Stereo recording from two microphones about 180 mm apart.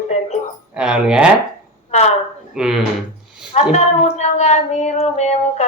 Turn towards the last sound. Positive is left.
turn(degrees=40)  # may be behind; listen again after turning